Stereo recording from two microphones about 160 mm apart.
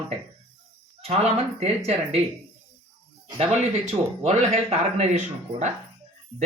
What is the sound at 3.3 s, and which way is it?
Speech, 40° right (ahead or behind).